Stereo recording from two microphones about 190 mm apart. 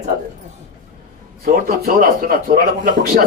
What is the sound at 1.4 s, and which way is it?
A man's voice, 50° right (ahead or behind).